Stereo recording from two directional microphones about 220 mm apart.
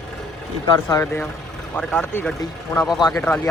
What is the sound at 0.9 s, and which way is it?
Speech, 15° left (ahead or behind).